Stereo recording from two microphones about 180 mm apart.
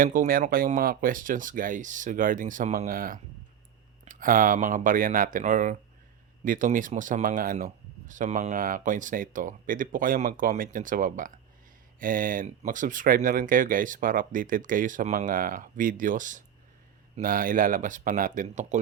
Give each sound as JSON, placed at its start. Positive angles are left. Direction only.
{"t": 0.0, "sound": "speech", "side_deg": -50}